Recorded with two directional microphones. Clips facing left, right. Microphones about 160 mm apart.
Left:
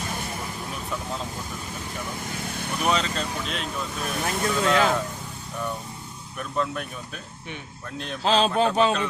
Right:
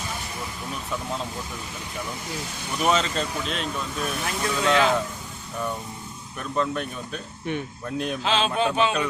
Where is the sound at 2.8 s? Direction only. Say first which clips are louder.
Right 2 dB; centre (ahead or behind).